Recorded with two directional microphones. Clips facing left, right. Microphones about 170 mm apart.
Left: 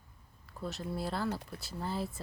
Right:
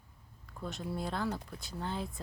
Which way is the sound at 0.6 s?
Centre (ahead or behind).